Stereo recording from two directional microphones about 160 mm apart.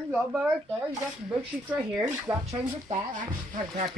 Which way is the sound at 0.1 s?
5° right (ahead or behind).